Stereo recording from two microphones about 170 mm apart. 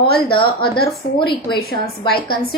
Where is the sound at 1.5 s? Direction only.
65° left (ahead or behind).